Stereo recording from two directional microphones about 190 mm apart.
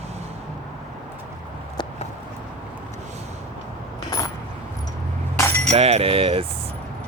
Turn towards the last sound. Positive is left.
turn(degrees=-30)  # may be behind; listen again after turning